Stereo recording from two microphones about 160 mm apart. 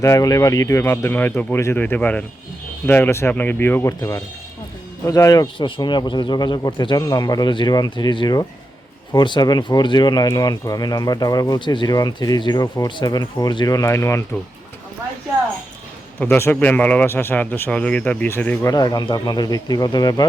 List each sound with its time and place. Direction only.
0.0 s a man's voice: 20° left (ahead or behind)
16.1 s a man's voice: 10° left (ahead or behind)
18.7 s speech: 25° left (ahead or behind)